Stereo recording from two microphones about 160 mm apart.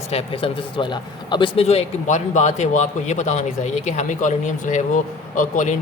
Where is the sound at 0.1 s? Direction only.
35° left (ahead or behind).